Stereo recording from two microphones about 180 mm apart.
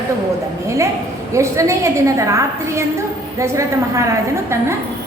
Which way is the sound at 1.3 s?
15° right (ahead or behind).